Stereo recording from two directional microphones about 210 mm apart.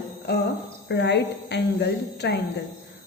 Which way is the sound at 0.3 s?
50° left (ahead or behind).